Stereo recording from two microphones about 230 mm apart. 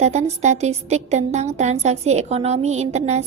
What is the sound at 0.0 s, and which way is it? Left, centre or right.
A woman's voice, right.